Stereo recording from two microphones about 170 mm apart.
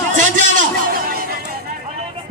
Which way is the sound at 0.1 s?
50° right (ahead or behind).